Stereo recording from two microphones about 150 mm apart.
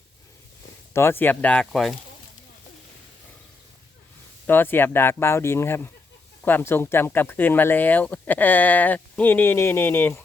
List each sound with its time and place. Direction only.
0.9 s speech: 15° left (ahead or behind)
4.4 s speech: 15° left (ahead or behind)